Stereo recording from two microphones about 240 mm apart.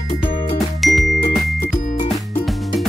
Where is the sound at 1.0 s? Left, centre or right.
Left.